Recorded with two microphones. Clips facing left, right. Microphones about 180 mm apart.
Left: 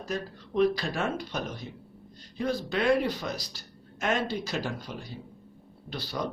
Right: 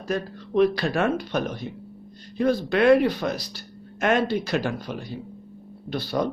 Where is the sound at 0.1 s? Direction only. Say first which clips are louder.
Right 7 dB; 65° right (ahead or behind).